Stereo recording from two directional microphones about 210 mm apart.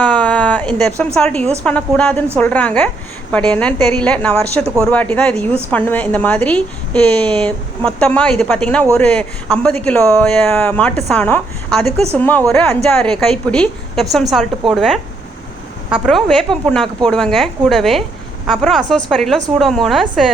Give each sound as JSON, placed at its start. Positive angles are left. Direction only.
{"t": 0.0, "sound": "a woman's voice", "side_deg": 5}
{"t": 11.9, "sound": "speech", "side_deg": -30}
{"t": 12.1, "sound": "a woman's voice", "side_deg": 10}